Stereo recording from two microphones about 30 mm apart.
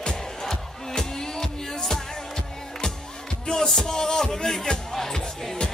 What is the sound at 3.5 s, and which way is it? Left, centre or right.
Music, centre.